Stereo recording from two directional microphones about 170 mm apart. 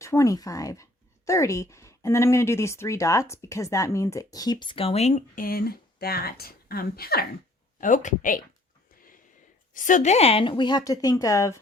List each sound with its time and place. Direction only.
0.0 s speech: 15° left (ahead or behind); by 7.3 s 65° left (ahead or behind)
7.8 s speech: 50° left (ahead or behind)
9.7 s speech: 50° left (ahead or behind); by 11.6 s 15° left (ahead or behind)